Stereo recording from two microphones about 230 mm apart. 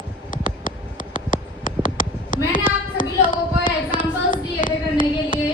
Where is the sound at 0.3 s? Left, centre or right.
Left.